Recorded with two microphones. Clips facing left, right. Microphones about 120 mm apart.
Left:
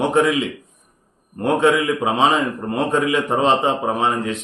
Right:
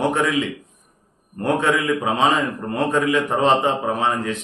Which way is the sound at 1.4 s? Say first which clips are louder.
Left 3 dB; 20° left (ahead or behind).